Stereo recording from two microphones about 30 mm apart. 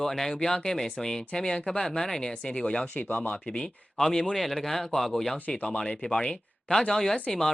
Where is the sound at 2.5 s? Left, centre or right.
Left.